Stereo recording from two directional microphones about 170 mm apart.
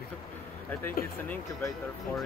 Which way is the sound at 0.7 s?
10° left (ahead or behind).